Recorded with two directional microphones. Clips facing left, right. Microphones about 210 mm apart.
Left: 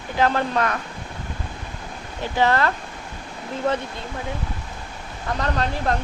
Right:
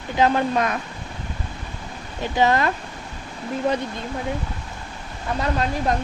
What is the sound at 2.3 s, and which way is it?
Speech, 15° right (ahead or behind).